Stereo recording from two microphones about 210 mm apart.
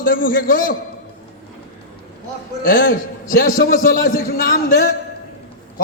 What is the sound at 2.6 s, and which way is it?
A man's voice, 45° left (ahead or behind).